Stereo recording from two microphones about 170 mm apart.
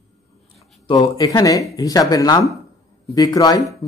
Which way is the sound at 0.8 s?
20° left (ahead or behind).